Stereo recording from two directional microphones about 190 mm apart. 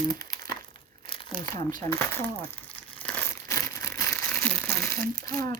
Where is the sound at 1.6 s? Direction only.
45° right (ahead or behind).